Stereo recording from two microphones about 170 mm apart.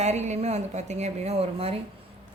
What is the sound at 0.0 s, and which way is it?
A woman's voice, 40° right (ahead or behind).